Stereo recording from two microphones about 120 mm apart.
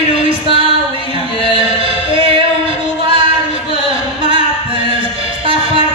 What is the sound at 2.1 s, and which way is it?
Singing, 50° right (ahead or behind).